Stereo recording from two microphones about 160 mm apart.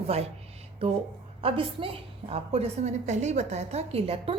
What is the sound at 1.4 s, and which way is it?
A woman's voice, 35° right (ahead or behind).